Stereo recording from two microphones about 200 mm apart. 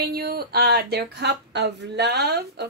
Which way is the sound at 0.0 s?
50° right (ahead or behind).